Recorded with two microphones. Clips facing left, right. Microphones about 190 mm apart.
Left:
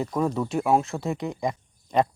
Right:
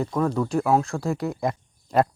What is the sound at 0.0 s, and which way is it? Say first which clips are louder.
Speech: right 2 dB; centre (ahead or behind).